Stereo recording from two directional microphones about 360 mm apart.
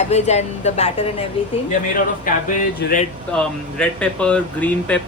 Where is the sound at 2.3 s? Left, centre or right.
Left.